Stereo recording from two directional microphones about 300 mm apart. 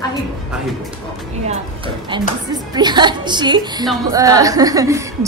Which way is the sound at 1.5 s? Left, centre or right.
Centre.